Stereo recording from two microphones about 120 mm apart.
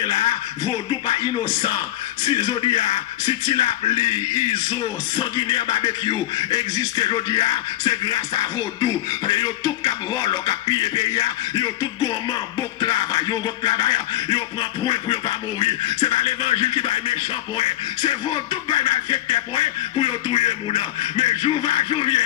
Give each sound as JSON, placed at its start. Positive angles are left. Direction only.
{"t": 0.0, "sound": "music", "side_deg": 40}
{"t": 2.2, "sound": "speech", "side_deg": 40}
{"t": 17.6, "sound": "music", "side_deg": 40}